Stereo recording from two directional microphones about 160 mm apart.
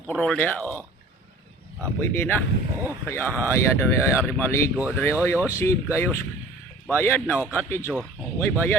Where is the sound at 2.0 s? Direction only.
15° left (ahead or behind).